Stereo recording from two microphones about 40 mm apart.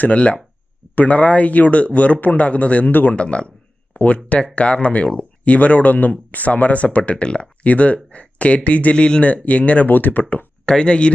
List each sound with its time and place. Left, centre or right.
0.0 s speech: left
2.9 s speech: left
3.2 s speech: left
3.9 s speech: left
4.3 s speech: left
9.2 s speech: left
9.8 s speech: left
10.7 s speech: left